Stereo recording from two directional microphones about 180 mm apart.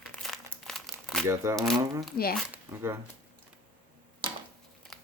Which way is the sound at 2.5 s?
15° right (ahead or behind).